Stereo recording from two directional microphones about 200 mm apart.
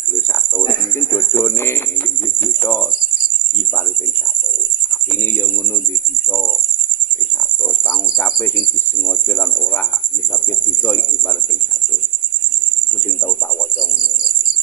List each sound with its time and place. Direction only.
0.6 s speech: 15° left (ahead or behind)
7.9 s speech: 10° left (ahead or behind)